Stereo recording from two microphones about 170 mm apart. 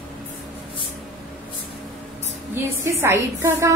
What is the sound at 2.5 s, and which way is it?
A woman's voice, 15° right (ahead or behind).